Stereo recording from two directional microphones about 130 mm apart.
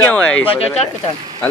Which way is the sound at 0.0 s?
10° left (ahead or behind).